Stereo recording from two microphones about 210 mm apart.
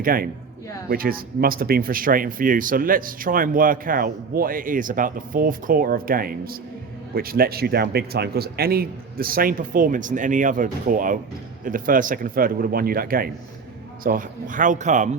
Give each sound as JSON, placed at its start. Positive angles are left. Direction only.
{"t": 0.0, "sound": "speech", "side_deg": -45}